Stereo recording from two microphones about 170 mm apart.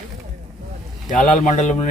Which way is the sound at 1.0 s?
45° left (ahead or behind).